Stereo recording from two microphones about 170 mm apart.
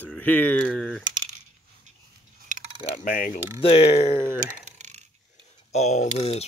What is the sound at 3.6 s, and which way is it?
Speech, 35° left (ahead or behind).